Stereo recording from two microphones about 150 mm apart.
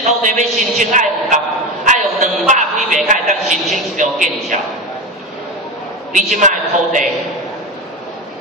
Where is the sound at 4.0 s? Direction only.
55° right (ahead or behind).